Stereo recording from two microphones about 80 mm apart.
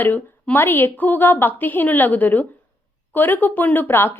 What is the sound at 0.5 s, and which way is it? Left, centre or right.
Speech, left.